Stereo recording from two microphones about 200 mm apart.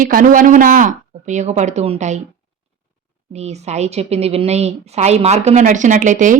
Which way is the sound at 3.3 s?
35° right (ahead or behind).